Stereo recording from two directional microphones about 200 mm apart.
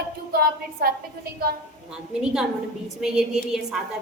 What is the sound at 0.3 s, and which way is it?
A woman's voice, 50° right (ahead or behind).